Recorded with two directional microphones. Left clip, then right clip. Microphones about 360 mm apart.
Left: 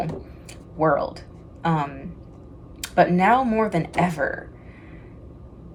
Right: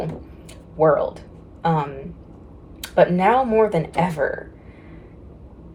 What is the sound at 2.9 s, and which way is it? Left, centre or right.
Speech, centre.